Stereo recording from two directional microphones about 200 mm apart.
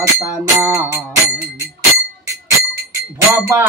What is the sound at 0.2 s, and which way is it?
Music, 15° right (ahead or behind).